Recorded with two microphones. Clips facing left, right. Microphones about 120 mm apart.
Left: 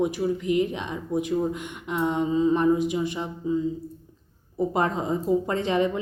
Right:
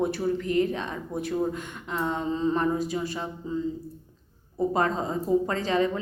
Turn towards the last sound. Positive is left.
turn(degrees=20)  # may be behind; listen again after turning